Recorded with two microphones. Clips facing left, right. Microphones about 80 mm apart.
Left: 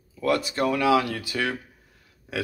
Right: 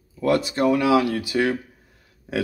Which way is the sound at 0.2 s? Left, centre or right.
Right.